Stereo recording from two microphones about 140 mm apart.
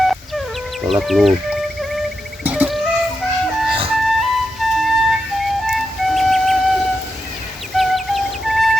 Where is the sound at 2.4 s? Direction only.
10° right (ahead or behind).